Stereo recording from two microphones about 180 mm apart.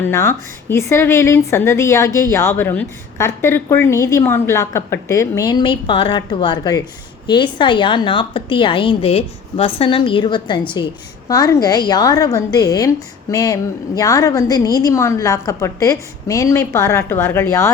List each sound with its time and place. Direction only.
0.1 s a woman's voice: 15° left (ahead or behind)